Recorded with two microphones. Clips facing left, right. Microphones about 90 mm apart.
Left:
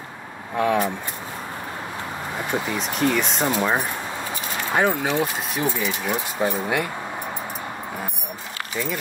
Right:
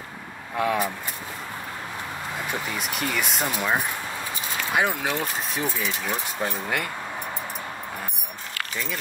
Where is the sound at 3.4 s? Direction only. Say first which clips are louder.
Left 4 dB; 20° left (ahead or behind).